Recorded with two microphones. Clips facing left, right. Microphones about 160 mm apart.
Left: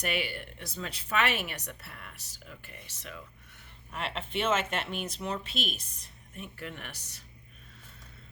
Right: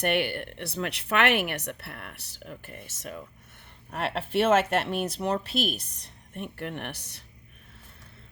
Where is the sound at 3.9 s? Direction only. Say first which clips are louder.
Right 7 dB; 55° right (ahead or behind).